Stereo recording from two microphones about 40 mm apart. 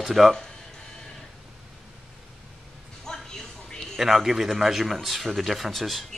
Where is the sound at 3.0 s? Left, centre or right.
Centre.